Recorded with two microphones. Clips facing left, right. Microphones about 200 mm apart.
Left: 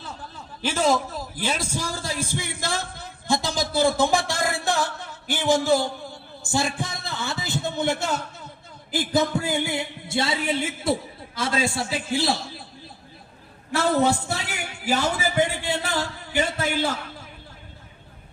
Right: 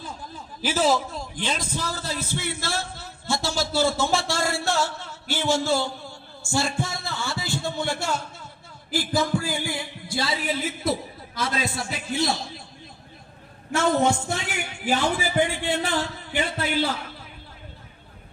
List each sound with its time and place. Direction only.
0.0 s a man's voice: 10° right (ahead or behind); by 12.6 s 30° left (ahead or behind)
13.7 s a man's voice: 35° left (ahead or behind)